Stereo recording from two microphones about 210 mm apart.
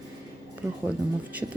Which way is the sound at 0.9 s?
5° right (ahead or behind).